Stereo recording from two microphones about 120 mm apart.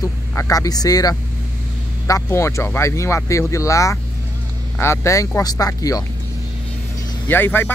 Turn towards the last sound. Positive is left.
turn(degrees=15)  # may be behind; listen again after turning